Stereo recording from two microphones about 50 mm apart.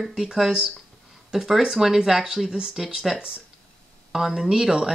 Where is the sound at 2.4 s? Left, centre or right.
Centre.